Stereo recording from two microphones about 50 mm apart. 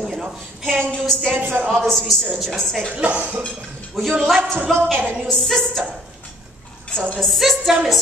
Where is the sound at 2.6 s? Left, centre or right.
Centre.